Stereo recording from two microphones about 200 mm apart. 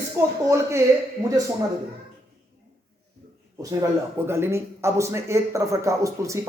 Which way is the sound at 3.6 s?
15° right (ahead or behind).